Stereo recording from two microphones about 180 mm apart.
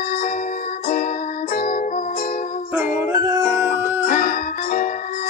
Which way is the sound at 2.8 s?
15° right (ahead or behind).